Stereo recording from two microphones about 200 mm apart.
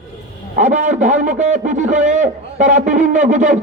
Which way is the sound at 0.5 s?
35° right (ahead or behind).